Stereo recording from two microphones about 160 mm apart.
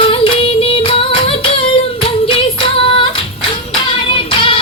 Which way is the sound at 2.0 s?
35° left (ahead or behind).